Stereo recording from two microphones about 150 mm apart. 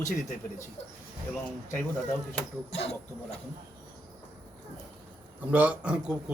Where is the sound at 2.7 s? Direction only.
45° left (ahead or behind).